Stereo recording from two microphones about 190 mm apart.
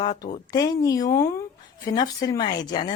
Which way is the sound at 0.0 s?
20° left (ahead or behind).